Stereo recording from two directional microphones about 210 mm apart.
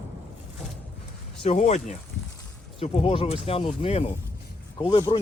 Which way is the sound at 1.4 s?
35° left (ahead or behind).